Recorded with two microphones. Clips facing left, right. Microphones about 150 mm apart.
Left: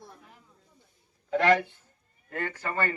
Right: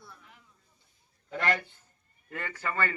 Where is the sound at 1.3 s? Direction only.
75° left (ahead or behind).